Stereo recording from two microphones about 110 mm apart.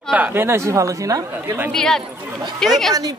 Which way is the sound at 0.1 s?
15° right (ahead or behind).